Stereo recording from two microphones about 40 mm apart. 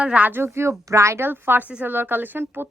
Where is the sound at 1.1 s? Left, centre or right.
Right.